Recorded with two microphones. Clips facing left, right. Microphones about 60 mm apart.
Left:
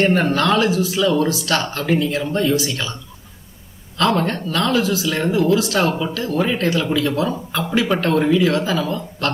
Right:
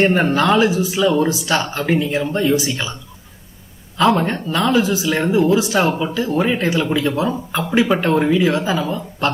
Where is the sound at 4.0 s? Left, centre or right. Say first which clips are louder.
Right 2 dB; centre.